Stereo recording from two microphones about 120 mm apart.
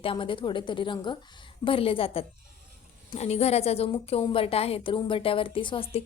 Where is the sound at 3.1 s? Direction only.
60° left (ahead or behind); by 6.0 s 45° left (ahead or behind).